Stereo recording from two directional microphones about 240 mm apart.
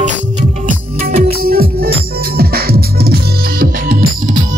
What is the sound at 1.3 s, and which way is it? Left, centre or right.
Music, right.